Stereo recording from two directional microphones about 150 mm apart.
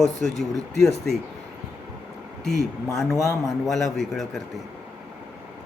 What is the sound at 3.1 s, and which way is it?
Speech, 20° left (ahead or behind).